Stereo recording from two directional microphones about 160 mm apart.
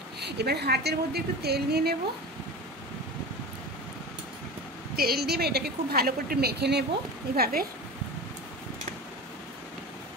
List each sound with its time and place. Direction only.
0.2 s a woman's voice: 90° right
4.9 s a woman's voice: 75° right (ahead or behind)
7.3 s a woman's voice: 70° right (ahead or behind)